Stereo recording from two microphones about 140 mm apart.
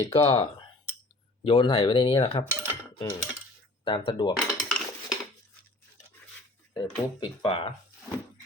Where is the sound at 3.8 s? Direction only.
35° left (ahead or behind).